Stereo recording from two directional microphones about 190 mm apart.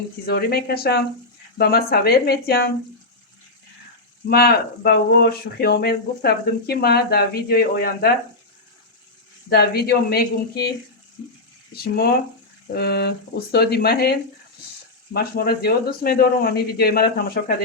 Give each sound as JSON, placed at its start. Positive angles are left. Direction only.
{"t": 0.3, "sound": "speech", "side_deg": 55}
{"t": 4.3, "sound": "speech", "side_deg": 55}
{"t": 9.5, "sound": "speech", "side_deg": 55}
{"t": 11.8, "sound": "speech", "side_deg": 55}